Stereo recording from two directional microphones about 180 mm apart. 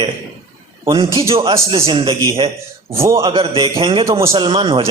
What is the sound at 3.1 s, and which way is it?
Speech, 30° right (ahead or behind).